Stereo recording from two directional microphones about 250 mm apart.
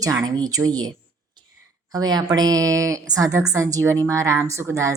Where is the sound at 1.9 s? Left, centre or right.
Centre.